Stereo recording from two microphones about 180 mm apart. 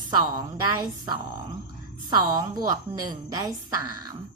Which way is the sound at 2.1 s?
20° right (ahead or behind).